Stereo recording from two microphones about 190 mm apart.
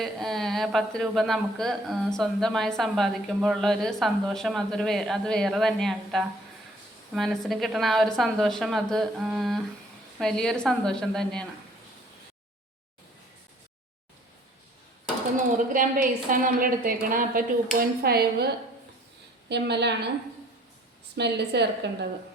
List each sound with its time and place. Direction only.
0.0 s a man's voice: centre (ahead or behind)
15.7 s a woman's voice: 45° right (ahead or behind)
19.5 s a woman's voice: 65° right (ahead or behind)
21.2 s a woman's voice: 60° right (ahead or behind)